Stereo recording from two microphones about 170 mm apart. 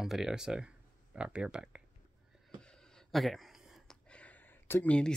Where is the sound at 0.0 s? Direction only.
Centre (ahead or behind).